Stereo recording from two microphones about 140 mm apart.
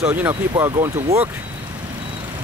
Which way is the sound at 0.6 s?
20° right (ahead or behind).